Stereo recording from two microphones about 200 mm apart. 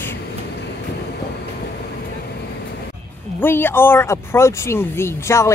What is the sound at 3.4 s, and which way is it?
Speech, 10° left (ahead or behind).